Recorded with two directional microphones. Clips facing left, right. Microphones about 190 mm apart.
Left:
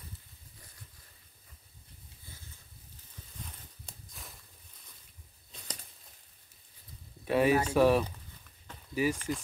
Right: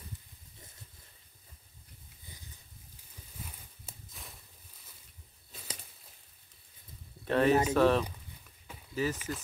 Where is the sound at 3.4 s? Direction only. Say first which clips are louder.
Right 1 dB; 5° right (ahead or behind).